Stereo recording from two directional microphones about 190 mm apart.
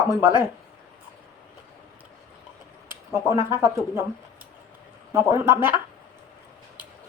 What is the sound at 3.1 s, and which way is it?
Speech, 15° right (ahead or behind).